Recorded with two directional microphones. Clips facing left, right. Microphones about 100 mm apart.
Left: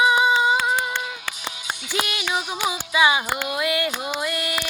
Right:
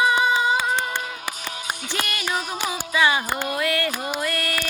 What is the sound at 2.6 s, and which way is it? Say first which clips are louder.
Music: left 2 dB; 15° left (ahead or behind).